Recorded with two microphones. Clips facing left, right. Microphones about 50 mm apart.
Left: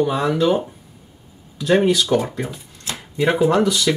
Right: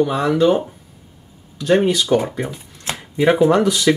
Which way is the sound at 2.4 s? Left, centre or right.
Right.